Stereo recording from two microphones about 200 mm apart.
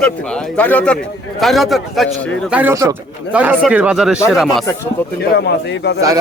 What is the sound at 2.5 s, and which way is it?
Speech, 10° right (ahead or behind).